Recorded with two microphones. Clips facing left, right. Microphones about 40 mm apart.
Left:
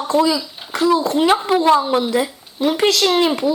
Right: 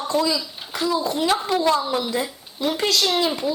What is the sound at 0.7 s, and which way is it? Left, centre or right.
Speech, left.